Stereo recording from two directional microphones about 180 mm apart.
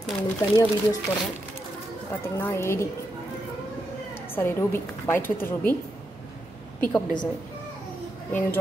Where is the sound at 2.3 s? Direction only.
15° left (ahead or behind).